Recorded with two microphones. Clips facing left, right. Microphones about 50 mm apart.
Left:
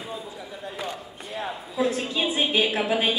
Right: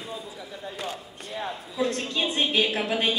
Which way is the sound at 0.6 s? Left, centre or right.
Centre.